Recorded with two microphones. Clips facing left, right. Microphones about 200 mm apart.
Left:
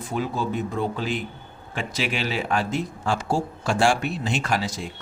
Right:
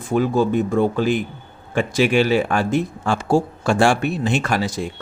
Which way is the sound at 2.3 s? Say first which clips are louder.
Right 7 dB; 50° right (ahead or behind).